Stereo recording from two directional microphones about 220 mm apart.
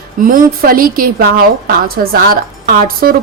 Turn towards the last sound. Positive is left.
turn(degrees=-40)  # may be behind; listen again after turning